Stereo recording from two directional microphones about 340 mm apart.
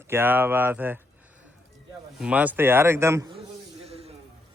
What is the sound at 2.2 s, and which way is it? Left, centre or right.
A man's voice, centre.